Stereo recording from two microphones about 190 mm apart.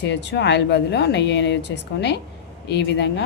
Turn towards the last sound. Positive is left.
turn(degrees=65)  # may be behind; listen again after turning